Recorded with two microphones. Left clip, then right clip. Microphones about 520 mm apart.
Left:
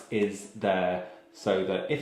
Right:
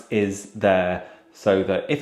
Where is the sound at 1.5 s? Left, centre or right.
Right.